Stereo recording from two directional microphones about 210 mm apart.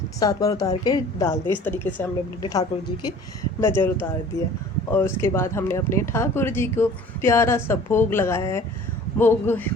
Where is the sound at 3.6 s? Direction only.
10° left (ahead or behind).